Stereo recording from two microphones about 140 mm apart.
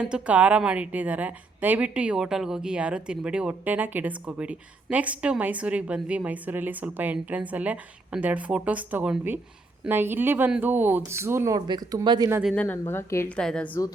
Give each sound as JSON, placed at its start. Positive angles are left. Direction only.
{"t": 0.0, "sound": "a woman's voice", "side_deg": -10}
{"t": 12.5, "sound": "a woman's voice", "side_deg": 15}
{"t": 13.3, "sound": "a woman's voice", "side_deg": 5}